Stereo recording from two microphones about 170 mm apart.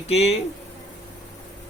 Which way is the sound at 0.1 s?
40° left (ahead or behind).